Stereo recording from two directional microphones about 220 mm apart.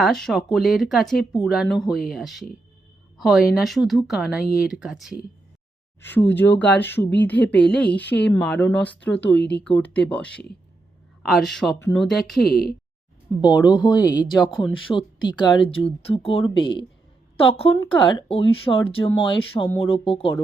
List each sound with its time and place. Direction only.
0.0 s speech: centre (ahead or behind)
6.1 s speech: 10° left (ahead or behind)
9.3 s speech: 50° left (ahead or behind)
9.6 s speech: 5° left (ahead or behind)
13.4 s speech: 20° left (ahead or behind)
14.2 s speech: centre (ahead or behind)
14.9 s speech: 20° left (ahead or behind)